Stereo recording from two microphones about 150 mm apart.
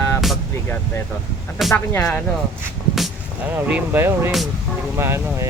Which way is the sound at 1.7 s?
20° left (ahead or behind).